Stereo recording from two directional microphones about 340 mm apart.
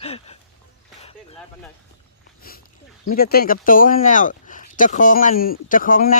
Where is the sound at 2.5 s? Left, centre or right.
Left.